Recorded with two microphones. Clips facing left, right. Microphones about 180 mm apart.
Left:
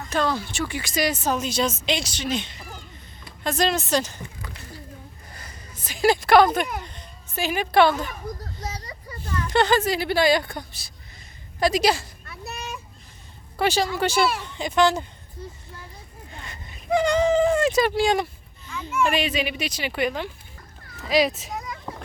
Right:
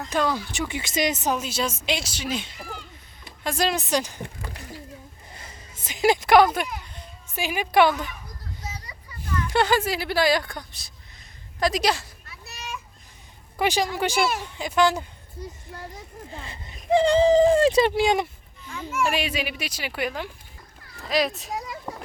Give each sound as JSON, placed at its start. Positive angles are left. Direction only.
{"t": 0.1, "sound": "speech", "side_deg": -10}
{"t": 1.4, "sound": "speech", "side_deg": -5}
{"t": 5.3, "sound": "a sound", "side_deg": -25}
{"t": 7.9, "sound": "children playing", "side_deg": 40}
{"t": 8.8, "sound": "vehicle", "side_deg": 40}
{"t": 9.2, "sound": "a sound", "side_deg": 35}
{"t": 9.5, "sound": "a woman's voice", "side_deg": -10}
{"t": 12.2, "sound": "a sound", "side_deg": 55}
{"t": 13.6, "sound": "speech", "side_deg": -15}
{"t": 16.3, "sound": "speech", "side_deg": -30}
{"t": 19.1, "sound": "a woman's voice", "side_deg": -10}
{"t": 21.9, "sound": "a sound", "side_deg": 5}